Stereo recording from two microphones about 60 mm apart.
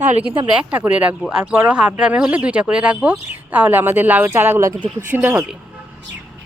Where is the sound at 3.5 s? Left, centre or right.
Right.